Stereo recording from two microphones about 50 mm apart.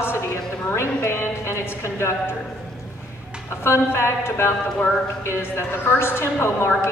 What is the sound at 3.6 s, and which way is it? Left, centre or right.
A woman's voice, left.